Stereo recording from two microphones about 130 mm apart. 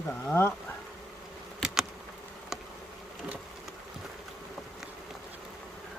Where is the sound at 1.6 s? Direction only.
5° right (ahead or behind).